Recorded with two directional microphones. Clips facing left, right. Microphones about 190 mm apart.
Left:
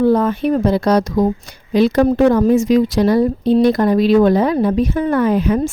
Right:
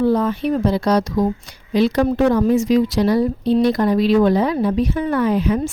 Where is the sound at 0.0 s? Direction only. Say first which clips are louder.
Left 3 dB; 50° left (ahead or behind).